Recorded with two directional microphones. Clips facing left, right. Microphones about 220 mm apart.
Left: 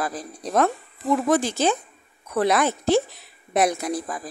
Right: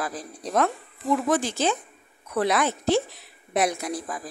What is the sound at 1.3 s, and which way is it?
A woman's voice, 40° left (ahead or behind).